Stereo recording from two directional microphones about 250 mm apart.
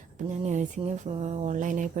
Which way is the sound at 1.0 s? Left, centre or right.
Right.